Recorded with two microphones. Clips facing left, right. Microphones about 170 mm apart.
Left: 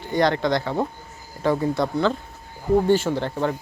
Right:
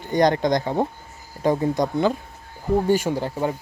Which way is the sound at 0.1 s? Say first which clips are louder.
Right 2 dB; 15° right (ahead or behind).